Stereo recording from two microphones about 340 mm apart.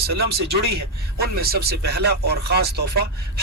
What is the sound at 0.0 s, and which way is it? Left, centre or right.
Speech, right.